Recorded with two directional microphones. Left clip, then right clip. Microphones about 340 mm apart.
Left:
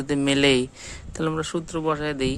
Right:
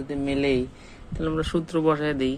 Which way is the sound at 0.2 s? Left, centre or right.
Left.